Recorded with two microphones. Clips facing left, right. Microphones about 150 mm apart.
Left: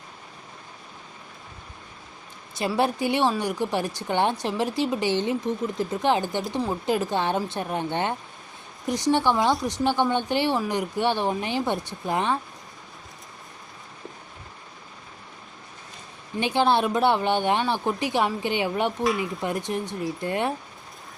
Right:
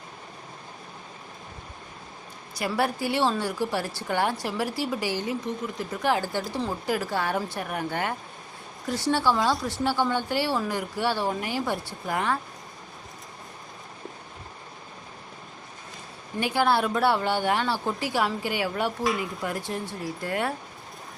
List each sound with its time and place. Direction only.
2.6 s speech: 20° left (ahead or behind)
16.4 s speech: 20° left (ahead or behind)
19.0 s dishes: centre (ahead or behind)
19.4 s speech: 20° left (ahead or behind)